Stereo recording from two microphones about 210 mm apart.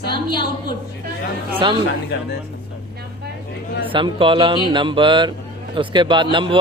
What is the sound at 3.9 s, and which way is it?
A man's voice, 25° right (ahead or behind).